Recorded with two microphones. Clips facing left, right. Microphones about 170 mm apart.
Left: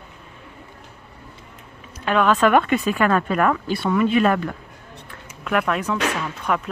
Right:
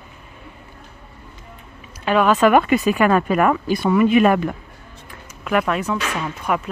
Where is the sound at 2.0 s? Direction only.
5° right (ahead or behind).